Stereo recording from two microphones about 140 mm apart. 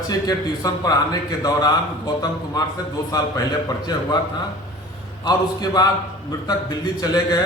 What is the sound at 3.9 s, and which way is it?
Speech, 30° left (ahead or behind).